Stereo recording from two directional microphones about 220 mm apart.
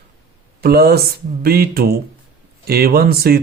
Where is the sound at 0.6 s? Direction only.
45° right (ahead or behind).